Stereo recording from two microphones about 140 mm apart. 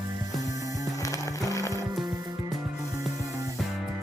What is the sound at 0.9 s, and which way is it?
Music, 25° left (ahead or behind).